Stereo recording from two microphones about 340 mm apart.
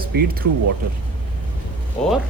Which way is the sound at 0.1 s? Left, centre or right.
Right.